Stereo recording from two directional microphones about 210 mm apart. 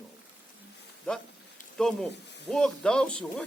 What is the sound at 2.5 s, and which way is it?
Speech, 5° left (ahead or behind).